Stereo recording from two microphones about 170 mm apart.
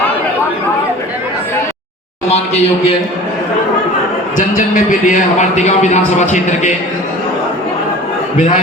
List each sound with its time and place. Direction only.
2.3 s a man's voice: 40° left (ahead or behind)
4.4 s a man's voice: 50° left (ahead or behind)